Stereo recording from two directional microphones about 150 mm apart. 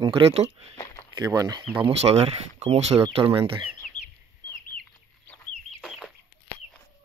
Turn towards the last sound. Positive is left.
turn(degrees=0)  # may be behind; listen again after turning